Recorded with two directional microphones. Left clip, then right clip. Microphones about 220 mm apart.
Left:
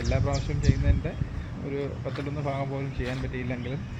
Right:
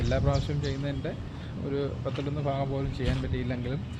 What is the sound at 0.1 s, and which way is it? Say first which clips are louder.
Speech: right 2 dB; 15° right (ahead or behind).